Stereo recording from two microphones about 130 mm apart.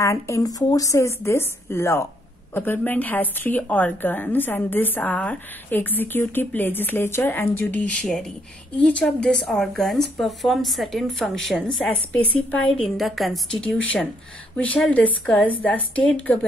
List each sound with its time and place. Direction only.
0.0 s a woman's voice: 25° left (ahead or behind); by 16.3 s 10° left (ahead or behind)